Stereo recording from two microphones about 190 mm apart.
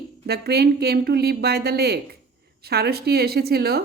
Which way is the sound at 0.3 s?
55° right (ahead or behind).